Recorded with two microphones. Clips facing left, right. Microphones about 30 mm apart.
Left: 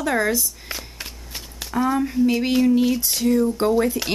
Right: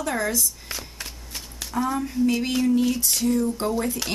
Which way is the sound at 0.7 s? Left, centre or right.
Centre.